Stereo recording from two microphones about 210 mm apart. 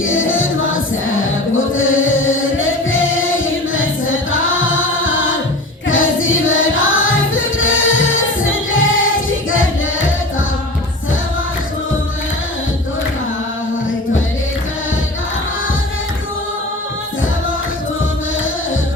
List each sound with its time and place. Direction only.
0.0 s music: 70° left (ahead or behind)